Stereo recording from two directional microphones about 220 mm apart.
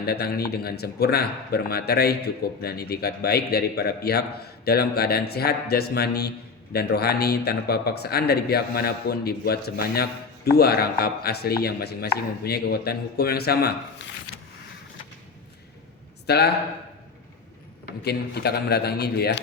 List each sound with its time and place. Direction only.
0.0 s speech: 45° left (ahead or behind)
16.2 s a man's voice: 45° left (ahead or behind)
18.0 s speech: 45° left (ahead or behind)